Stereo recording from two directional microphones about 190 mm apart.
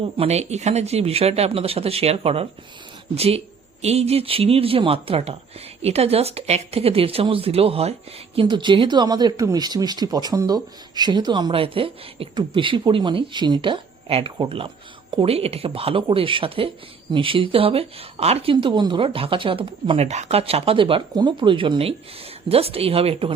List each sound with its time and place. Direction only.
0.2 s speech: 35° right (ahead or behind)